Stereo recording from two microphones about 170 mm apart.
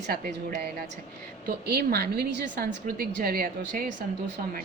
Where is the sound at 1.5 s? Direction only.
75° right (ahead or behind).